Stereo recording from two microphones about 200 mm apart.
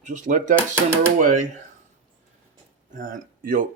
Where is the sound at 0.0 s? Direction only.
40° right (ahead or behind).